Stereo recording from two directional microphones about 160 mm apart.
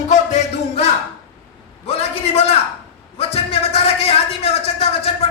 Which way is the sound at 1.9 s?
40° left (ahead or behind).